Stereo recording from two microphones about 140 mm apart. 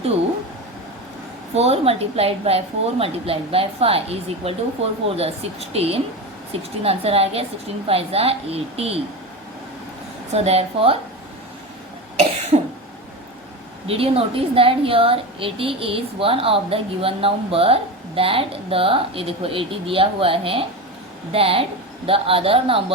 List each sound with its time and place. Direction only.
1.5 s a woman's voice: 50° right (ahead or behind)
10.3 s a woman's voice: 50° right (ahead or behind)
12.5 s cough: 50° right (ahead or behind)
13.8 s a woman's voice: 45° right (ahead or behind)